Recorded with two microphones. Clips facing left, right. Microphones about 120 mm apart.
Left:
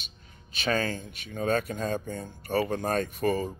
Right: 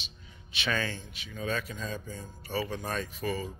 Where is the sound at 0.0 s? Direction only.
45° left (ahead or behind).